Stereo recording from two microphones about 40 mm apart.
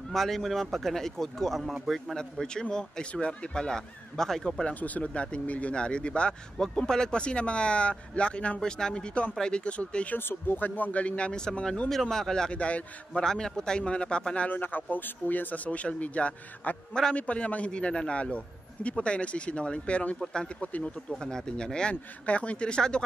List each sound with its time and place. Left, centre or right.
0.1 s speech: centre
2.7 s speech: centre
4.7 s a man's voice: left
10.1 s speech: left
10.8 s a man's voice: left
11.9 s speech: centre
12.4 s speech: left
13.2 s a man's voice: centre
14.5 s speech: left
16.6 s speech: left
17.1 s a man's voice: left
21.2 s a man's voice: centre
22.2 s a man's voice: left